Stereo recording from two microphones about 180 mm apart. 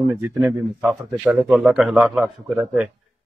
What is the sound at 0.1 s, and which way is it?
Speech, 15° right (ahead or behind).